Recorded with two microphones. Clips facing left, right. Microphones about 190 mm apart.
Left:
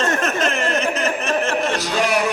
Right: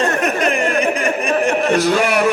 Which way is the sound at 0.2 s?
15° right (ahead or behind).